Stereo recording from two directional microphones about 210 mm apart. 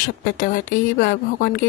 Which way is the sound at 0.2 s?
40° left (ahead or behind).